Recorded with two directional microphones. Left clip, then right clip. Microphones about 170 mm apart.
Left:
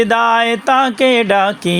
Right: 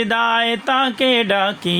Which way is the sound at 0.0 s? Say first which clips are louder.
Left 5 dB; 40° left (ahead or behind).